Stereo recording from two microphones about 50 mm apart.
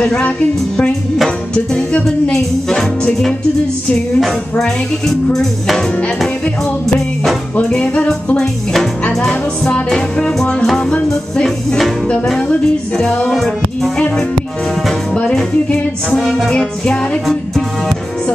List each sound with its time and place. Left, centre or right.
0.0 s music: left
1.5 s music: centre
7.7 s music: left
9.3 s music: centre
13.3 s music: centre
16.5 s music: left
17.3 s music: centre